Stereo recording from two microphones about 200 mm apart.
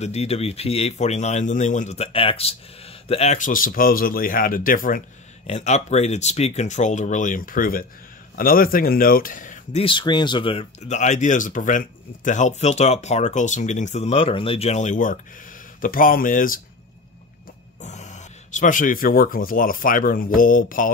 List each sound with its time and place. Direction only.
0.0 s speech: 30° left (ahead or behind)
17.8 s speech: 35° left (ahead or behind)